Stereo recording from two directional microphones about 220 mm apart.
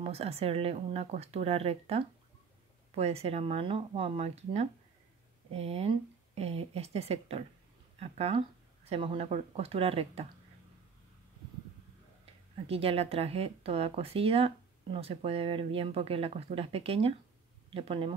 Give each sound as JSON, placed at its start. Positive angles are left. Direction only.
{"t": 0.0, "sound": "speech", "side_deg": -25}
{"t": 12.6, "sound": "speech", "side_deg": -25}